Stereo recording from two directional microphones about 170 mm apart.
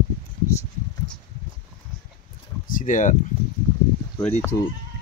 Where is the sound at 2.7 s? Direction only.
50° left (ahead or behind).